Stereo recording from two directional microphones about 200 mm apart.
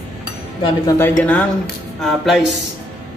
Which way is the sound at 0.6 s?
15° left (ahead or behind).